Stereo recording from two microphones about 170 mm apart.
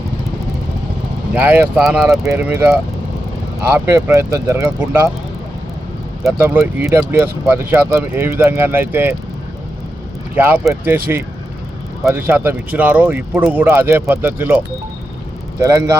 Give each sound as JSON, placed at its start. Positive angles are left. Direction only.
{"t": 1.3, "sound": "speech", "side_deg": -10}
{"t": 2.2, "sound": "speech", "side_deg": -15}
{"t": 3.9, "sound": "speech", "side_deg": -15}
{"t": 6.4, "sound": "speech", "side_deg": -10}
{"t": 10.3, "sound": "speech", "side_deg": -10}
{"t": 12.0, "sound": "speech", "side_deg": -15}